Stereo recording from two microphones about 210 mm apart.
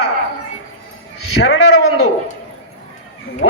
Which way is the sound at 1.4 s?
80° left.